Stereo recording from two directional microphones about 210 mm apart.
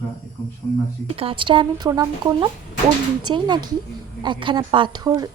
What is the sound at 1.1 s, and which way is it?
Speech, 25° right (ahead or behind).